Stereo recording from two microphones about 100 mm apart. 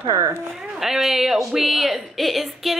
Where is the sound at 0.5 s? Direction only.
5° right (ahead or behind).